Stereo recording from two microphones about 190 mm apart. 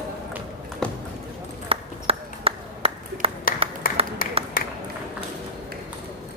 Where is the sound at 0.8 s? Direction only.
5° left (ahead or behind).